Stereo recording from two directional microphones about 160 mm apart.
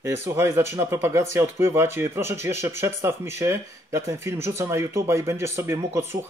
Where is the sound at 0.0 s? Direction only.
15° right (ahead or behind).